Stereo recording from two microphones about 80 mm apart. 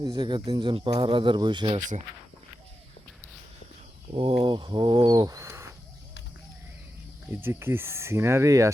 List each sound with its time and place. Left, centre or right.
0.0 s speech: right
4.1 s speech: right
5.5 s a sound: right
7.3 s speech: right